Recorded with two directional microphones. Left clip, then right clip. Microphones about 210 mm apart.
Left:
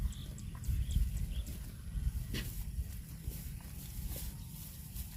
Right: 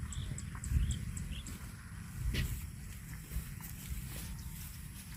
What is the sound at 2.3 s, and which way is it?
Vehicle, 50° left (ahead or behind).